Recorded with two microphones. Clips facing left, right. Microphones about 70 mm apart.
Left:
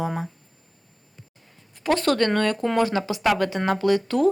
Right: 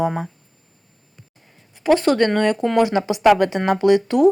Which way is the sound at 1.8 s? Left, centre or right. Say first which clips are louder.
Right 5 dB; centre.